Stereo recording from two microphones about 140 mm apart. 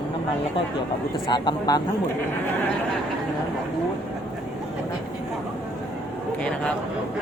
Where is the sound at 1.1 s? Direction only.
35° left (ahead or behind).